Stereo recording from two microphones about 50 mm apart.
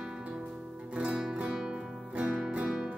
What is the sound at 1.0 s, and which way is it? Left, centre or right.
Music, centre.